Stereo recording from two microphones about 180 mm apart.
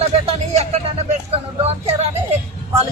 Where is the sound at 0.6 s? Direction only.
35° right (ahead or behind).